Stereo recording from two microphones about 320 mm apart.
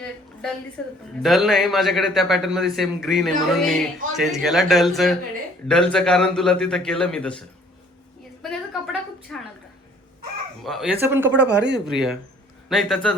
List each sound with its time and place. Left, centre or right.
1.2 s speech: centre
10.6 s speech: centre
11.3 s speech: right
11.9 s speech: centre